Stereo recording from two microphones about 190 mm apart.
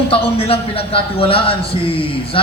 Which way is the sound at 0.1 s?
30° left (ahead or behind).